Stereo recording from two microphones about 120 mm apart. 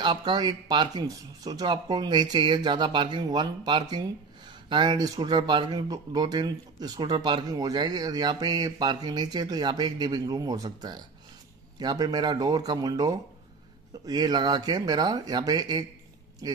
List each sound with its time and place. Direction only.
0.0 s speech: 40° right (ahead or behind)